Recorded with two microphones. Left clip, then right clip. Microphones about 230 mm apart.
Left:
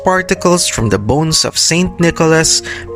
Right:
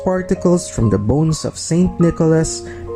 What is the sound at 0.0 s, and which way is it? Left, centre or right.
Speech, left.